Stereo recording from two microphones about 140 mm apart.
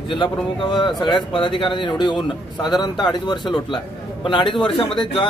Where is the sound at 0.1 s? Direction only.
35° left (ahead or behind).